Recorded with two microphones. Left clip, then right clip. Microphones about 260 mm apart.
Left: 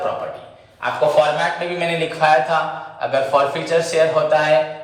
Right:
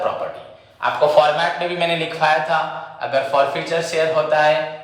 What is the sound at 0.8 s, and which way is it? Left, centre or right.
A man's voice, centre.